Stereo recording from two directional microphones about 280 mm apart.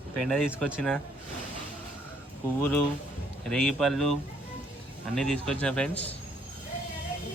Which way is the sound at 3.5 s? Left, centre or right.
Centre.